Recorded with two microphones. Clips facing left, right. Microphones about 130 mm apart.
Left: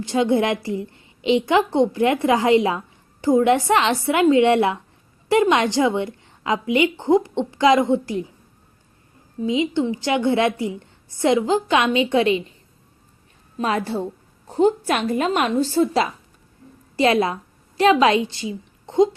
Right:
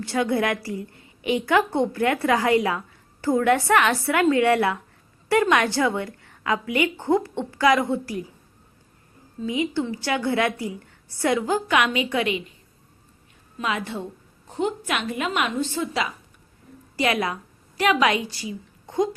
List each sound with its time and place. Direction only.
0.0 s a woman's voice: 20° left (ahead or behind)
9.4 s a woman's voice: 20° left (ahead or behind)
13.6 s a woman's voice: 35° left (ahead or behind)